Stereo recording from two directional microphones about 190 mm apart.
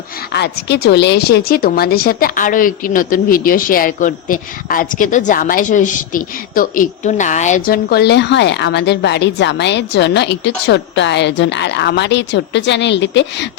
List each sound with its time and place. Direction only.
0.3 s a woman's voice: 60° left (ahead or behind); by 7.8 s 40° left (ahead or behind)
7.9 s a woman's voice: 60° left (ahead or behind)